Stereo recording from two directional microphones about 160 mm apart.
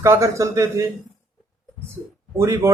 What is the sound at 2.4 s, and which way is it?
Speech, 20° right (ahead or behind).